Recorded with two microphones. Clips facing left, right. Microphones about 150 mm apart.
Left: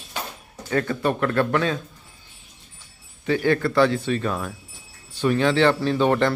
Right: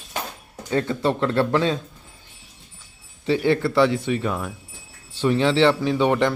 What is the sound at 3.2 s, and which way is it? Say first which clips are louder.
A man's voice: right 1 dB; 25° right (ahead or behind).